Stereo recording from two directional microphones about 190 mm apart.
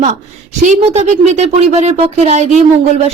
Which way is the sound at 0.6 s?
35° right (ahead or behind).